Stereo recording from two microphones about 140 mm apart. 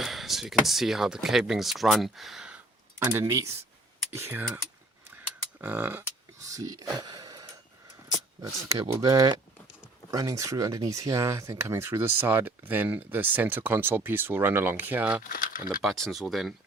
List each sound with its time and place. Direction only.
0.0 s speech: centre (ahead or behind)
3.0 s speech: 20° right (ahead or behind)
5.0 s a sound: 15° right (ahead or behind)
8.4 s speech: 25° right (ahead or behind)
15.2 s speech: 90° left
15.8 s speech: centre (ahead or behind)